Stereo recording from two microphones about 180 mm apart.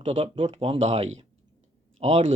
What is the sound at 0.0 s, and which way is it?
A man's voice, 30° right (ahead or behind).